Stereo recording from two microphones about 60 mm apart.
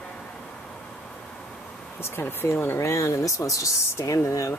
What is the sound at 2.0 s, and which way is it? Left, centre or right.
Speech, left.